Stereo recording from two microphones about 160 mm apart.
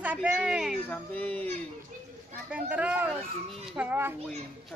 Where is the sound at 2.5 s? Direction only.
10° right (ahead or behind).